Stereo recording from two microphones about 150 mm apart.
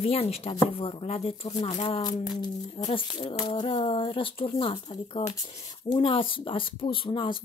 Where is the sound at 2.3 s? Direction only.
30° left (ahead or behind).